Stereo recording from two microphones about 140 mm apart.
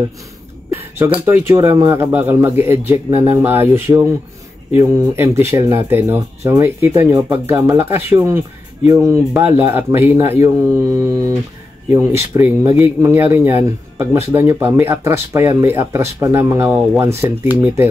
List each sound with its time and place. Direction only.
0.9 s speech: 20° right (ahead or behind)